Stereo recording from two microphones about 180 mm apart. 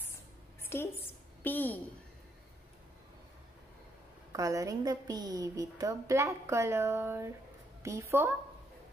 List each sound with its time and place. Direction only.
0.6 s a sound: 15° left (ahead or behind)
1.4 s a woman's voice: 10° left (ahead or behind)
4.3 s a woman's voice: 15° right (ahead or behind)